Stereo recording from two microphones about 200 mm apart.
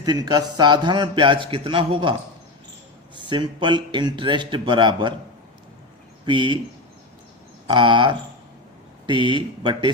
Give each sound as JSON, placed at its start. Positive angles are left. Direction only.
{"t": 0.0, "sound": "a man's voice", "side_deg": -20}
{"t": 3.2, "sound": "a man's voice", "side_deg": -25}
{"t": 6.2, "sound": "a man's voice", "side_deg": -25}
{"t": 7.7, "sound": "a man's voice", "side_deg": -25}